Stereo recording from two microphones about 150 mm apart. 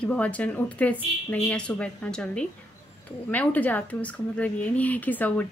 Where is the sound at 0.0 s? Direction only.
10° left (ahead or behind).